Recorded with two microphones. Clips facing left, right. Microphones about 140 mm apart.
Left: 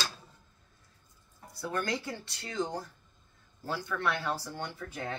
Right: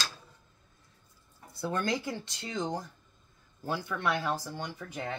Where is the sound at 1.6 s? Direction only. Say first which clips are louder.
Right 2 dB; 25° right (ahead or behind).